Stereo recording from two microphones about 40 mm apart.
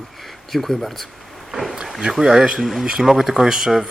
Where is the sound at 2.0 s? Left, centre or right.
Centre.